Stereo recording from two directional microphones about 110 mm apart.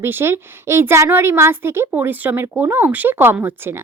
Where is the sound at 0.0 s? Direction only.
20° right (ahead or behind).